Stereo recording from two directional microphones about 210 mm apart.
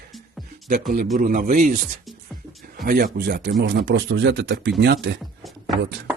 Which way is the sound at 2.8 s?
45° right (ahead or behind).